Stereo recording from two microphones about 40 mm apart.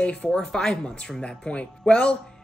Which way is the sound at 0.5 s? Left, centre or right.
Centre.